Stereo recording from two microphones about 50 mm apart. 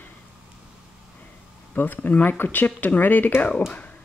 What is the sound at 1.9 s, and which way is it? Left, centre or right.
Speech, left.